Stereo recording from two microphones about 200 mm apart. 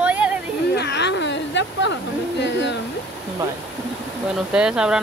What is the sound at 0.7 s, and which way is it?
Speech, 60° left (ahead or behind).